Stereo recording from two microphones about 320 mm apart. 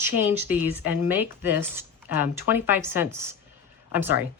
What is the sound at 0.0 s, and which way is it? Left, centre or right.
Speech, centre.